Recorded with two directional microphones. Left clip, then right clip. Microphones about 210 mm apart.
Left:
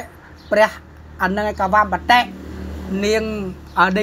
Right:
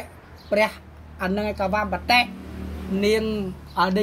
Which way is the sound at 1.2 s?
15° left (ahead or behind).